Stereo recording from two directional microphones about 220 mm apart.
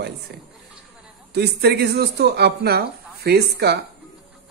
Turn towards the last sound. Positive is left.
turn(degrees=-45)  # may be behind; listen again after turning